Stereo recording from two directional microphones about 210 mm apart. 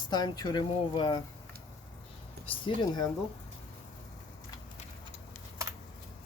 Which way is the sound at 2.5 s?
20° left (ahead or behind).